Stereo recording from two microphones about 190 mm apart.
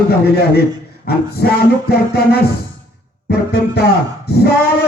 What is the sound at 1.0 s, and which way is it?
A man's voice, 55° left (ahead or behind).